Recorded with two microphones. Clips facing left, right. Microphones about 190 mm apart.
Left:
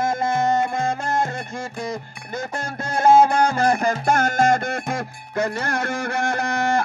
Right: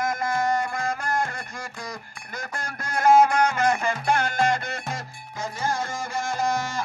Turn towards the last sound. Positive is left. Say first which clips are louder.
# left 4 dB
turn(degrees=60)  # may be behind; listen again after turning